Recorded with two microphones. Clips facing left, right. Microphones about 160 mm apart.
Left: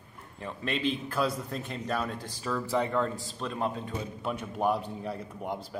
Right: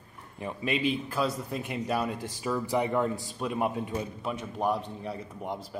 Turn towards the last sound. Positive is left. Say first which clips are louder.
# even
turn(degrees=0)  # may be behind; listen again after turning